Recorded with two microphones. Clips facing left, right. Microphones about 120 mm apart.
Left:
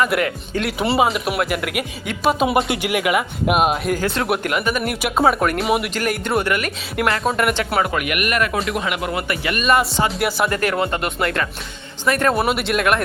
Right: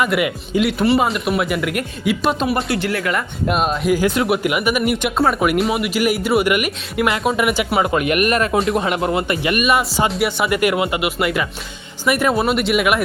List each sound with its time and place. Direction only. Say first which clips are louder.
0.0 s speech: right 1 dB; 10° right (ahead or behind)
0.9 s speech: right 1 dB; centre (ahead or behind)
4.0 s speech: right 4 dB; 5° right (ahead or behind)
4.8 s speech: right 1 dB; centre (ahead or behind)
7.9 s speech: right 5 dB; 30° right (ahead or behind)
10.2 s speech: right 1 dB; centre (ahead or behind)
10.5 s speech: right 3 dB; 15° right (ahead or behind)
12.3 s speech: right 2 dB; centre (ahead or behind)